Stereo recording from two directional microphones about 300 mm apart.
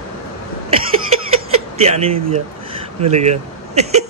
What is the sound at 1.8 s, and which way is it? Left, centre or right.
Speech, centre.